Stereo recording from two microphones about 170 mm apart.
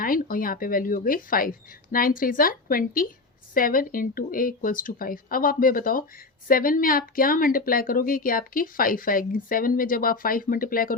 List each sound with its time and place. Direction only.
0.0 s a woman's voice: 55° left (ahead or behind)